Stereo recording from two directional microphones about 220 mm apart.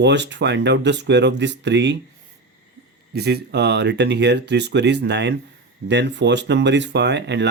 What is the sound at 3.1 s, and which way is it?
Speech, 45° right (ahead or behind).